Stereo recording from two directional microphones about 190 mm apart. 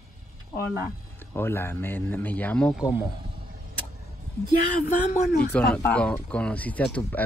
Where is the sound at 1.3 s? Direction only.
10° left (ahead or behind).